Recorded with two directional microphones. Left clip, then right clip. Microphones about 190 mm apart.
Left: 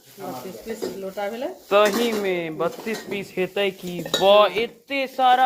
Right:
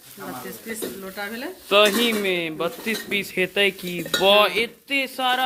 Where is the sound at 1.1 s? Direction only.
30° right (ahead or behind).